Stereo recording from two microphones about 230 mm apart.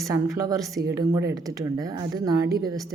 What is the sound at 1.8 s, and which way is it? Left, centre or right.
Speech, centre.